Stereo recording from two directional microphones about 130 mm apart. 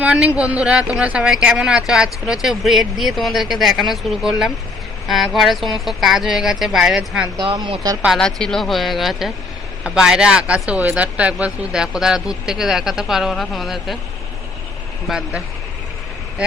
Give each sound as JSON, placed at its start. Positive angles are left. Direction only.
{"t": 0.0, "sound": "speech", "side_deg": -10}
{"t": 7.3, "sound": "speech", "side_deg": -35}
{"t": 8.0, "sound": "speech", "side_deg": 0}
{"t": 15.0, "sound": "speech", "side_deg": -5}